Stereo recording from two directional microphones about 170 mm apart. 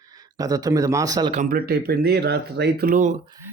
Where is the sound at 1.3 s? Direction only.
55° right (ahead or behind); by 2.9 s 75° right (ahead or behind).